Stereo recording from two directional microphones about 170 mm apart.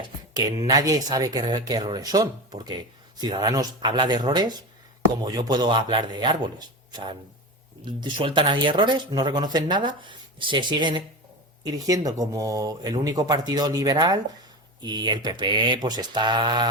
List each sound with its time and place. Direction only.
0.0 s speech: 20° right (ahead or behind)